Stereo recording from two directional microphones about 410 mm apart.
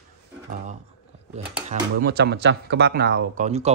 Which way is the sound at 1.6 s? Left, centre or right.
Right.